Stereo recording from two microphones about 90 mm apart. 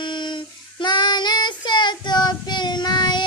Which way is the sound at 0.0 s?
60° left (ahead or behind).